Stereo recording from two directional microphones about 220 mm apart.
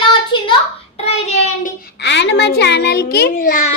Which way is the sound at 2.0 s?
55° left (ahead or behind).